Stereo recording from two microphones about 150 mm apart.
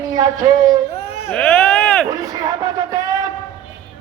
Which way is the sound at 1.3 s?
5° left (ahead or behind).